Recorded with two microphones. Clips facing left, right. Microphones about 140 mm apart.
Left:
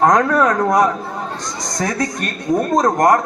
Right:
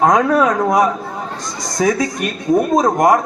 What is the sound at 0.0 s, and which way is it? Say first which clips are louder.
A man's voice: right 1 dB; 5° right (ahead or behind).